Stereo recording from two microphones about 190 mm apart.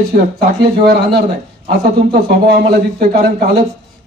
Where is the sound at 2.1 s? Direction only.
55° right (ahead or behind).